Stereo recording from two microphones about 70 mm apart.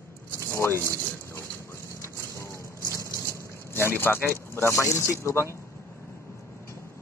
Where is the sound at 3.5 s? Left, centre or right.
Left.